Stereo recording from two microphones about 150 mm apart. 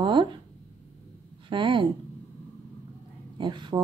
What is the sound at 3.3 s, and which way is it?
Speech, 30° right (ahead or behind).